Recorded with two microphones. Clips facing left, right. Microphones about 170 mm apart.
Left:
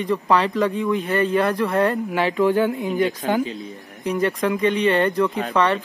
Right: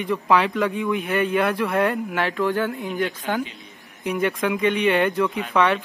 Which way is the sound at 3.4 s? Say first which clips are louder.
Left 9 dB; 35° left (ahead or behind).